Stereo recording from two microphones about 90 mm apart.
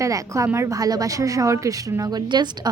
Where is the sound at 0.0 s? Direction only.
35° right (ahead or behind).